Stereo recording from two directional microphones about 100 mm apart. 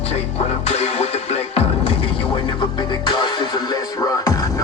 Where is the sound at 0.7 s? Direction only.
90° left.